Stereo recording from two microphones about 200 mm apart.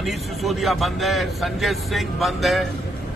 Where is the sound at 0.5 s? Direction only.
Centre (ahead or behind).